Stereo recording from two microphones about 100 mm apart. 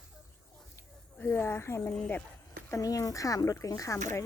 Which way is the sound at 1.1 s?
20° left (ahead or behind).